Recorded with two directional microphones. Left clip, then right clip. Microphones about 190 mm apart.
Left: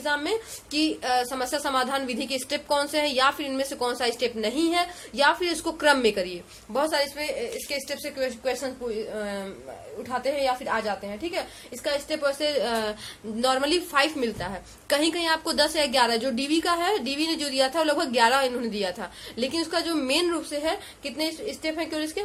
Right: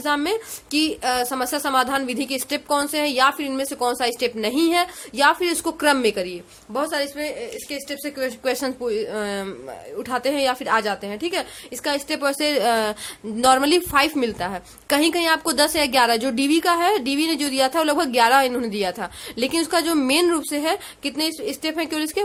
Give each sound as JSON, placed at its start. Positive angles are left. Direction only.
{"t": 0.0, "sound": "a woman's voice", "side_deg": -35}
{"t": 8.4, "sound": "a woman's voice", "side_deg": -50}